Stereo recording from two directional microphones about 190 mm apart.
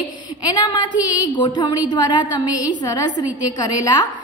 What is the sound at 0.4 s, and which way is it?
A woman's voice, 20° left (ahead or behind).